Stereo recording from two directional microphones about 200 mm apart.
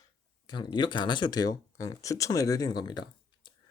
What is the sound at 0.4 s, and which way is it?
Speech, 20° left (ahead or behind).